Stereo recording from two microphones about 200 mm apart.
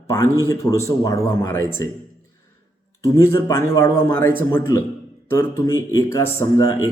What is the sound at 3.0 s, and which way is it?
Speech, 15° left (ahead or behind).